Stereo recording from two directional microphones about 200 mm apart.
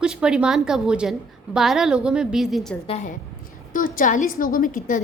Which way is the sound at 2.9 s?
30° left (ahead or behind).